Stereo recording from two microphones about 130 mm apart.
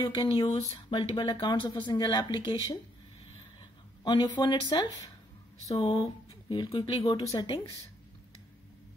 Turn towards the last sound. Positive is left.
turn(degrees=35)  # may be behind; listen again after turning